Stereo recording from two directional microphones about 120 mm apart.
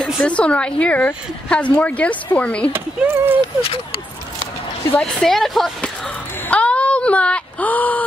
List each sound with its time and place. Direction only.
0.0 s a woman's voice: 10° left (ahead or behind)
2.7 s speech: 15° right (ahead or behind)
4.9 s a woman's voice: 5° left (ahead or behind)
6.5 s a sound: 10° left (ahead or behind)